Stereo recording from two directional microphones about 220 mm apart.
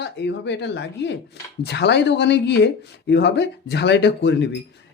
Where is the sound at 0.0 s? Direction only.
50° left (ahead or behind).